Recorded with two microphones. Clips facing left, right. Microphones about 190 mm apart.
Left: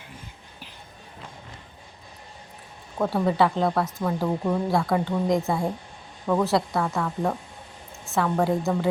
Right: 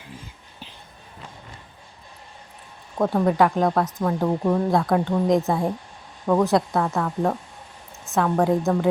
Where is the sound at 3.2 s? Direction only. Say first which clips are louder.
Right 2 dB; 15° right (ahead or behind).